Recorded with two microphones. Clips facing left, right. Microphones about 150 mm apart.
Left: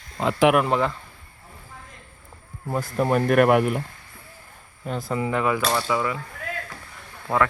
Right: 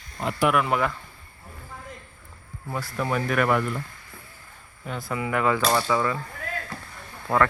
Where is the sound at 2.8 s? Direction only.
45° left (ahead or behind); by 3.8 s 65° left (ahead or behind).